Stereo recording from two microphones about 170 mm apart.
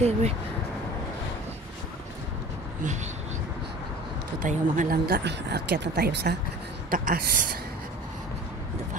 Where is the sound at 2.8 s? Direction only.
45° right (ahead or behind).